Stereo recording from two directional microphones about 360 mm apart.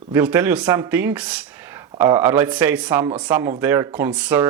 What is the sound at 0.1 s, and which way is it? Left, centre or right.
Speech, centre.